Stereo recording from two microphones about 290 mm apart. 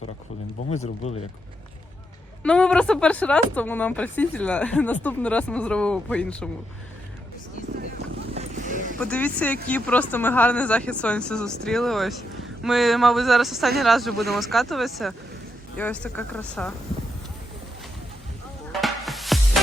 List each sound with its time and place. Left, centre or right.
0.7 s speech: left
2.4 s speech: centre
8.3 s vehicle: right
9.0 s speech: centre
18.7 s music: centre